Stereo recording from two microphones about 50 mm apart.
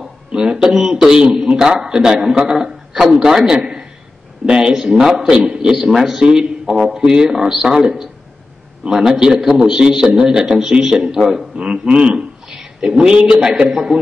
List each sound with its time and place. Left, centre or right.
0.3 s a man's voice: centre
5.2 s a man's voice: right